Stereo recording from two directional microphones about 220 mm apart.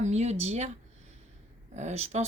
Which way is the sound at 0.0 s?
30° right (ahead or behind).